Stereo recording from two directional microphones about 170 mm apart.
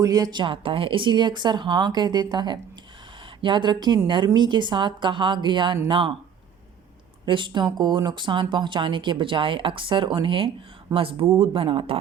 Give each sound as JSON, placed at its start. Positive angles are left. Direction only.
{"t": 0.0, "sound": "speech", "side_deg": -20}
{"t": 7.3, "sound": "speech", "side_deg": -30}